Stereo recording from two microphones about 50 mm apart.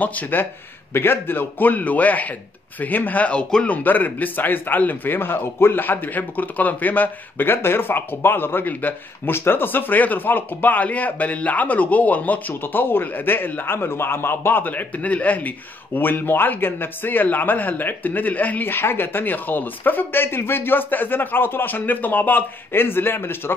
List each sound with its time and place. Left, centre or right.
0.0 s a man's voice: left
0.9 s a man's voice: left
9.3 s a man's voice: left
14.6 s a man's voice: left
18.7 s speech: left